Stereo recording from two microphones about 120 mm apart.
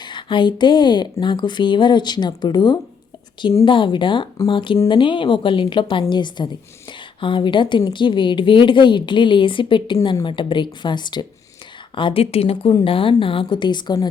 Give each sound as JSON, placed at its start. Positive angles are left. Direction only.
{"t": 0.0, "sound": "a woman's voice", "side_deg": 40}
{"t": 11.9, "sound": "a woman's voice", "side_deg": 50}